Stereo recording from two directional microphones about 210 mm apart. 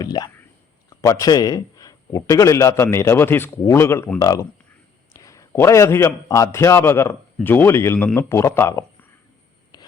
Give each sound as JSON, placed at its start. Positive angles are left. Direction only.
{"t": 0.0, "sound": "whispering", "side_deg": 20}
{"t": 0.9, "sound": "a man's voice", "side_deg": 15}